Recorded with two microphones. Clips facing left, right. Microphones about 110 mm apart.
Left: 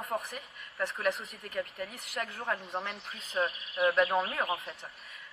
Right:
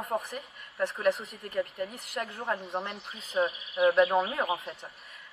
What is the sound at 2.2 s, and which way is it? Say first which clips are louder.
Speech: right 2 dB; 20° right (ahead or behind).